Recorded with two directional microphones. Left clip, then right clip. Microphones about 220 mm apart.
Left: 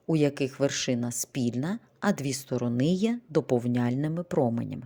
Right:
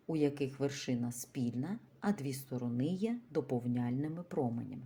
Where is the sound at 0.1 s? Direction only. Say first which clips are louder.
Left 8 dB; 45° left (ahead or behind).